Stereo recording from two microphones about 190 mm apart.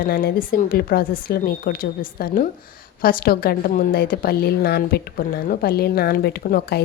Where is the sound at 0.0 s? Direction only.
55° left (ahead or behind).